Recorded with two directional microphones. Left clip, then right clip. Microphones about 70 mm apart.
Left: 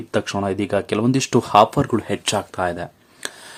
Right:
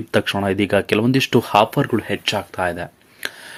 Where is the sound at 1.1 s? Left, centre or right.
Left.